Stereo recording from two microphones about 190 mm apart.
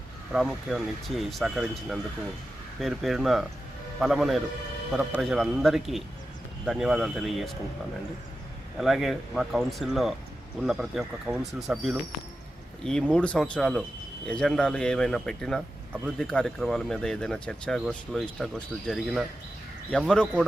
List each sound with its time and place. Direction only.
0.3 s speech: 5° right (ahead or behind)
8.8 s speech: centre (ahead or behind)